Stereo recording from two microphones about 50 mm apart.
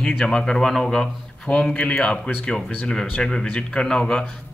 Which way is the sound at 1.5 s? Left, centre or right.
Left.